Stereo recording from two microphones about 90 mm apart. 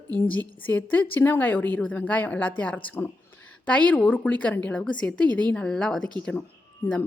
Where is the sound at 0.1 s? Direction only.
20° left (ahead or behind).